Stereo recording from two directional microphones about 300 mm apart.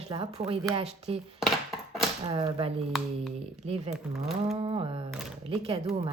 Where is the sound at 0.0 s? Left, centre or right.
Centre.